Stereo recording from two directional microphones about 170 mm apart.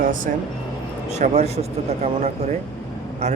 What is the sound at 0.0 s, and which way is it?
Speech, 55° right (ahead or behind).